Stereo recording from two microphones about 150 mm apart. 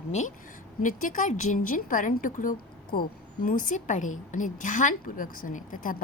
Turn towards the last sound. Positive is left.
turn(degrees=65)  # may be behind; listen again after turning